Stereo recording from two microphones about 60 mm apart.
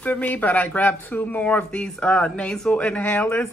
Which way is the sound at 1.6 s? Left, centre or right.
Centre.